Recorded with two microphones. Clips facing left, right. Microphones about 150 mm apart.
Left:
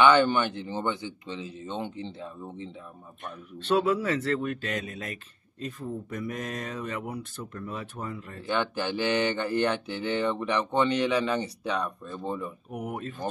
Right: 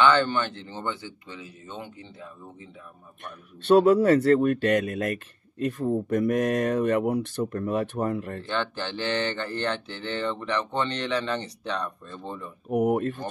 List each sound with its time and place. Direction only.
0.0 s speech: 15° left (ahead or behind)
3.7 s speech: 40° right (ahead or behind); by 5.9 s 70° right (ahead or behind)
6.0 s speech: 55° right (ahead or behind)
7.5 s speech: 55° right (ahead or behind)
8.4 s speech: 10° left (ahead or behind)
12.7 s speech: 50° right (ahead or behind)